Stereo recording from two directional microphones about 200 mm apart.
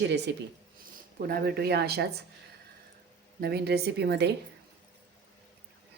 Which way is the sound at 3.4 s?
50° right (ahead or behind).